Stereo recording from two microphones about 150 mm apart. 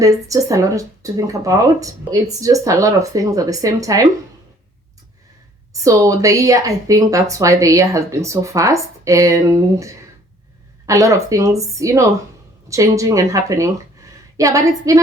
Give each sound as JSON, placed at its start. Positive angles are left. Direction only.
{"t": 0.0, "sound": "speech", "side_deg": -20}
{"t": 5.8, "sound": "speech", "side_deg": -20}